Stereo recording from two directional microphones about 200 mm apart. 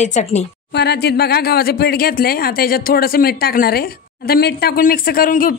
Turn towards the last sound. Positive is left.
turn(degrees=45)  # may be behind; listen again after turning